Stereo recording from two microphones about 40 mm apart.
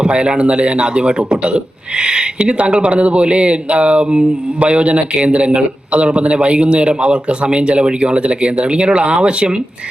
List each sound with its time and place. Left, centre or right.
0.0 s a man's voice: right